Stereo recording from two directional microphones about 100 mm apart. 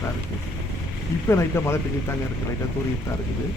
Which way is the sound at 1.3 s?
25° left (ahead or behind).